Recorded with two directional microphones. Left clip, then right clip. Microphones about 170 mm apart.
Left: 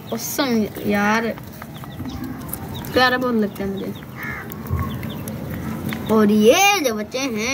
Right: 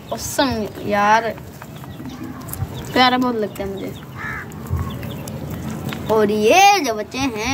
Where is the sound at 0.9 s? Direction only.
50° right (ahead or behind).